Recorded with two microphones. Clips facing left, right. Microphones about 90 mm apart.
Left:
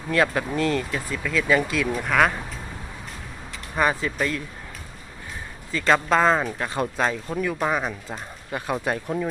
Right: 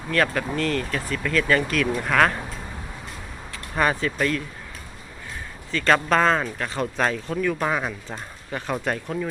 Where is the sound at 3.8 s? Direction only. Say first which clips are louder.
Even; 10° left (ahead or behind).